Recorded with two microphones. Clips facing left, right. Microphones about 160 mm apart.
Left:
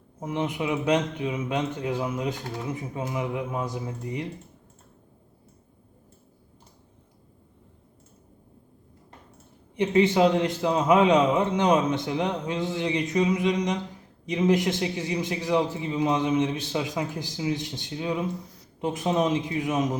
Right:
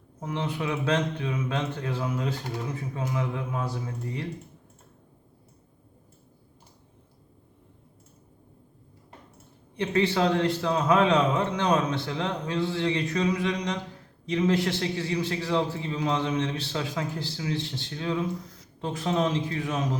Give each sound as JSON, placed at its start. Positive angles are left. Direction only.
{"t": 0.2, "sound": "speech", "side_deg": 15}
{"t": 9.7, "sound": "speech", "side_deg": 20}